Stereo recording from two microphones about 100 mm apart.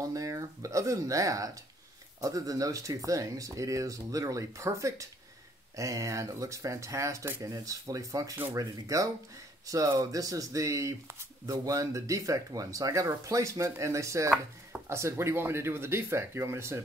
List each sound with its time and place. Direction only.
0.0 s speech: 35° right (ahead or behind)